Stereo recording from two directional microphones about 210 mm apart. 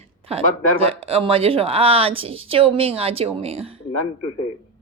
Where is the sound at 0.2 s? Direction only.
30° right (ahead or behind).